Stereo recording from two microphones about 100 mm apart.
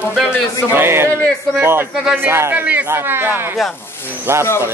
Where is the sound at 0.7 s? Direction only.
25° right (ahead or behind).